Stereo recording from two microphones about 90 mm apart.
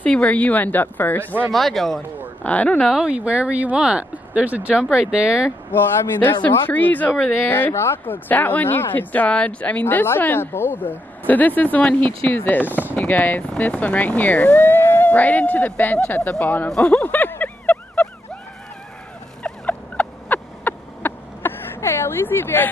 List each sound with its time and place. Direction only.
0.0 s speech: 15° left (ahead or behind)
1.5 s a man's voice: centre (ahead or behind)
2.4 s speech: 15° left (ahead or behind)
2.9 s speech: 10° right (ahead or behind)
5.7 s speech: 20° left (ahead or behind)
12.6 s speech: 20° right (ahead or behind)
12.9 s speech: 20° left (ahead or behind)
16.6 s a sound: 10° left (ahead or behind)
19.4 s fowl: 15° left (ahead or behind)